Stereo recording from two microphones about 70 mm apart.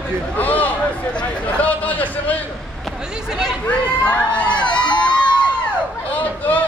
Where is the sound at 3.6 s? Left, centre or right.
Centre.